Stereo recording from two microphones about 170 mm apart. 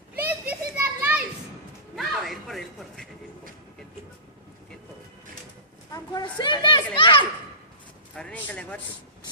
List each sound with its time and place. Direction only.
0.2 s children playing: 10° right (ahead or behind)
2.0 s a sound: centre (ahead or behind)
5.9 s children playing: 25° left (ahead or behind)
8.1 s speech: 5° left (ahead or behind)